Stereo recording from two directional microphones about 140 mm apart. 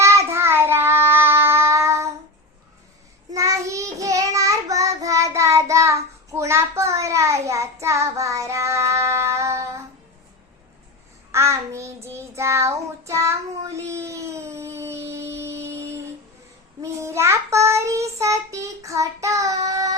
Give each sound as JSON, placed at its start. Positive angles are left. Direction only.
{"t": 0.0, "sound": "child singing", "side_deg": -20}
{"t": 3.3, "sound": "child singing", "side_deg": -20}
{"t": 11.3, "sound": "child singing", "side_deg": -20}
{"t": 13.7, "sound": "a sound", "side_deg": -20}
{"t": 16.8, "sound": "child singing", "side_deg": -20}